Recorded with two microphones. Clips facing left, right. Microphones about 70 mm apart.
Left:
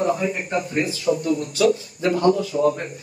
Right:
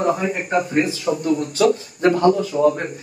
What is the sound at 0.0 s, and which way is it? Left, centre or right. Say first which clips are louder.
A man's voice: right 2 dB; right.